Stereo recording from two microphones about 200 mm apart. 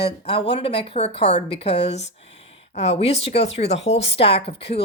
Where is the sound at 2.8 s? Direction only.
30° left (ahead or behind).